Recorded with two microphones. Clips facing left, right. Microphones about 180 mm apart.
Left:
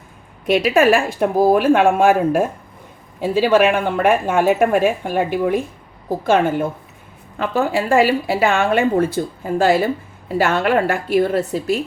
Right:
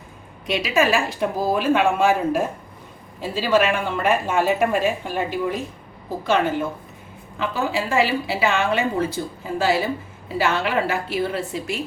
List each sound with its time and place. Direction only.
0.4 s a woman's voice: 55° left (ahead or behind)